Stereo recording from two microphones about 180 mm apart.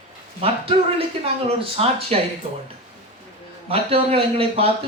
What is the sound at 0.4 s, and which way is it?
Speech, 30° right (ahead or behind).